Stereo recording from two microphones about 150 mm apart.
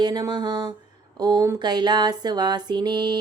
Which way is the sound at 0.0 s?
30° right (ahead or behind).